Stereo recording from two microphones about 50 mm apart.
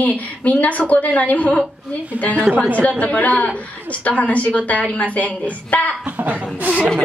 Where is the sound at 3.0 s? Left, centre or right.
Left.